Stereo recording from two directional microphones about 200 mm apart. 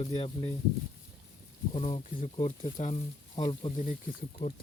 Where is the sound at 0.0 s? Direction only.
25° left (ahead or behind).